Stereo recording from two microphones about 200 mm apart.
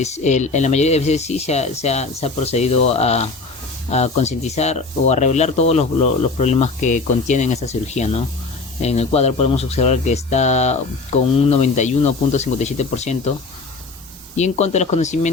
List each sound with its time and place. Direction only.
0.0 s speech: 35° left (ahead or behind)
14.3 s speech: 35° left (ahead or behind)